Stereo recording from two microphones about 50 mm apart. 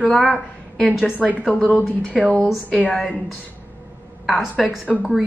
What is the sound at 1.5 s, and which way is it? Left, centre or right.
Speech, left.